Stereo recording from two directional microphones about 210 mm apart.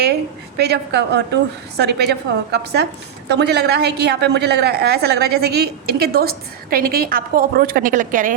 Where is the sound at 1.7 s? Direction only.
50° right (ahead or behind).